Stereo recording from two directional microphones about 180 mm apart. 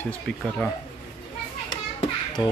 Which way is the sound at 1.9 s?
25° left (ahead or behind).